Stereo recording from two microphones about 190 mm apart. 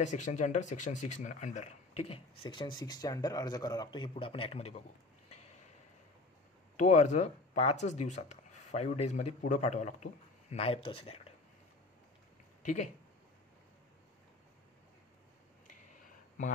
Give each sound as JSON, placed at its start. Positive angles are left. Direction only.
{"t": 0.0, "sound": "speech", "side_deg": 40}
{"t": 2.5, "sound": "speech", "side_deg": 25}
{"t": 6.8, "sound": "speech", "side_deg": 40}